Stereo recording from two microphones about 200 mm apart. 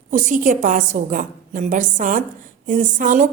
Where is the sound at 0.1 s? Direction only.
40° right (ahead or behind).